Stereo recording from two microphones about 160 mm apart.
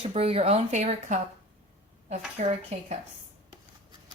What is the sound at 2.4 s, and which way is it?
Speech, 45° right (ahead or behind).